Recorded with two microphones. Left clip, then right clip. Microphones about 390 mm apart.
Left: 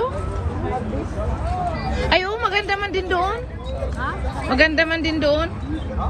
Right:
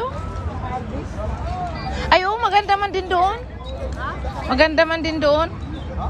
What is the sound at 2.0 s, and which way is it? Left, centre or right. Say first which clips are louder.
Speech: right 3 dB; centre.